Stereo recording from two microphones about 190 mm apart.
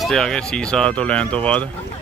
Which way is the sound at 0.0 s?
Centre (ahead or behind).